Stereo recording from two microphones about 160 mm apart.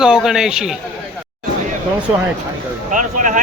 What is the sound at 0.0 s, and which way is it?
Speech, 5° right (ahead or behind).